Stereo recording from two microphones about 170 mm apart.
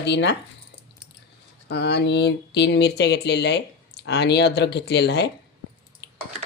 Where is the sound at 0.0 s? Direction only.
90° left.